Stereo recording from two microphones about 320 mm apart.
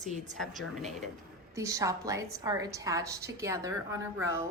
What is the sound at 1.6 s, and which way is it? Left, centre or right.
A woman's voice, centre.